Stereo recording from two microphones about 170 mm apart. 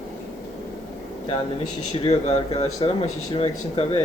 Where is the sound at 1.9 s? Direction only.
35° left (ahead or behind).